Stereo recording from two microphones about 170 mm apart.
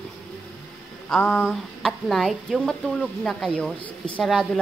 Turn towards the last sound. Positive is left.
turn(degrees=0)  # may be behind; listen again after turning